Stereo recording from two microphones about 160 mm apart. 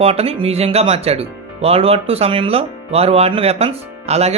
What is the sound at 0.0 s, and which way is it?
Speech, 40° right (ahead or behind).